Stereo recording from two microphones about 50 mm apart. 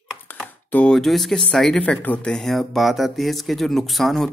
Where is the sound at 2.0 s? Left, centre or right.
Left.